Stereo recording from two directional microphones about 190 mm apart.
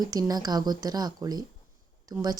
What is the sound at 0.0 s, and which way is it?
A woman's voice, 20° right (ahead or behind).